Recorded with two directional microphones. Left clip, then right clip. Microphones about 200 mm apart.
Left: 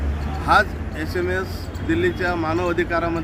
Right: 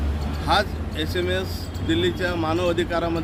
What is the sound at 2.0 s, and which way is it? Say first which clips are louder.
Speech: left 4 dB; 55° right (ahead or behind).